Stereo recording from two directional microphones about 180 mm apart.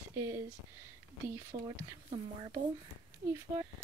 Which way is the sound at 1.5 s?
35° right (ahead or behind).